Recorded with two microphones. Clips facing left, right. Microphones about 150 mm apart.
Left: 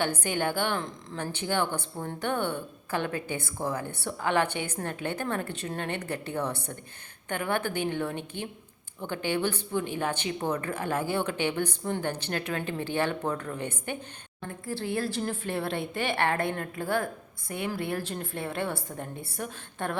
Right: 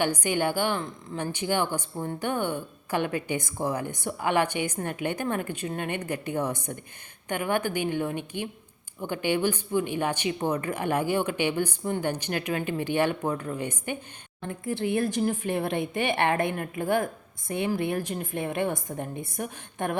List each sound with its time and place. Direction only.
0.0 s a woman's voice: 15° right (ahead or behind)